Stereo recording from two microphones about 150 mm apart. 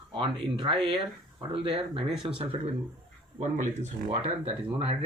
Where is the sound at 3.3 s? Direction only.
55° right (ahead or behind).